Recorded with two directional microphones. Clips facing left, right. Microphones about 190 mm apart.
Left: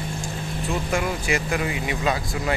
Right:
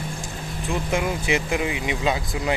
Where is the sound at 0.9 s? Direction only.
20° right (ahead or behind).